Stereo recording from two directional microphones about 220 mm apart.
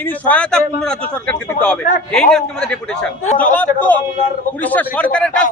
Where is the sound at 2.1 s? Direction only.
5° left (ahead or behind).